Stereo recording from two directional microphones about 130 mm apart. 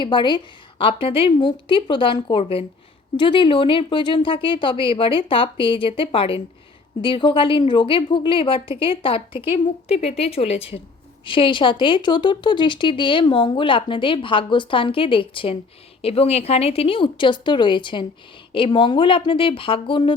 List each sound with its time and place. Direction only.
0.0 s a woman's voice: 35° left (ahead or behind)